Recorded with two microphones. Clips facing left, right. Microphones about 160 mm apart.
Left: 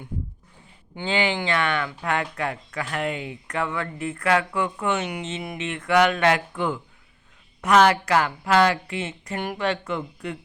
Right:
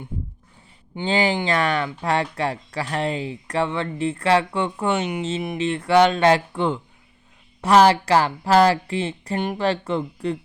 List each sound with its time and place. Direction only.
1.0 s speech: 40° right (ahead or behind)